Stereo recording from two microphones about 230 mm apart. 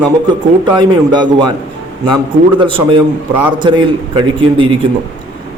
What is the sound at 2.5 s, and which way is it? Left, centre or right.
A man's voice, right.